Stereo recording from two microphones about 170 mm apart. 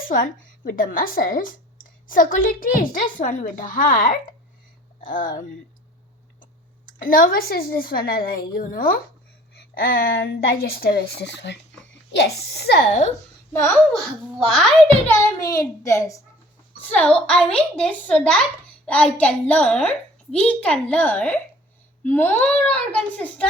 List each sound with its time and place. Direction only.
0.0 s speech: 55° left (ahead or behind)
6.4 s speech: 55° left (ahead or behind); by 11.6 s 90° left
11.9 s a child's voice: 75° left (ahead or behind)
12.9 s a woman's voice: 45° left (ahead or behind)
13.5 s a child's voice: 15° left (ahead or behind)
13.9 s a child's voice: centre (ahead or behind)
15.1 s a child's voice: 15° left (ahead or behind)